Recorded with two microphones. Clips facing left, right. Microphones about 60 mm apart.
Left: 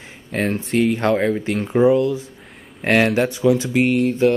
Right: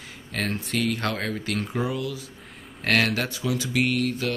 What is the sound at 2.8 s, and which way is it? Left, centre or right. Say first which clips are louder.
Speech: left 7 dB; centre.